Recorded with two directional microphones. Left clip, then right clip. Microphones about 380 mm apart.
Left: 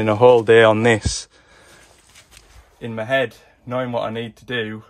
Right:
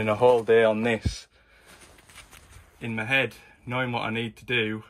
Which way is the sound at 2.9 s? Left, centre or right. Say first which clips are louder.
Left 5 dB; centre.